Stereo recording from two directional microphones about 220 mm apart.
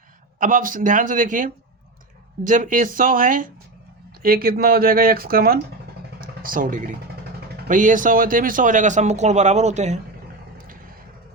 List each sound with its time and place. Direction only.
0.3 s speech: 35° right (ahead or behind)
6.1 s a sound: 40° right (ahead or behind)
7.7 s speech: 35° right (ahead or behind)